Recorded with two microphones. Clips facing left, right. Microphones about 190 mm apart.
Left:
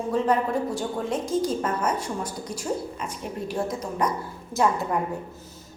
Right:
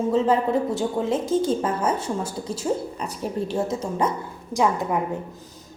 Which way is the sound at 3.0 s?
35° right (ahead or behind).